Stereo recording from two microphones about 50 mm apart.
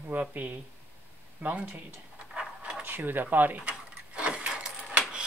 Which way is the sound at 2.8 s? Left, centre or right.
Right.